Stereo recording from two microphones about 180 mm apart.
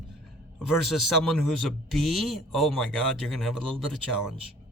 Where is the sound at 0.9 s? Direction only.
Centre (ahead or behind).